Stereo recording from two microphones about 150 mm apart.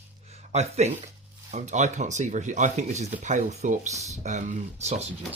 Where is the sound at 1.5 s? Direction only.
50° right (ahead or behind).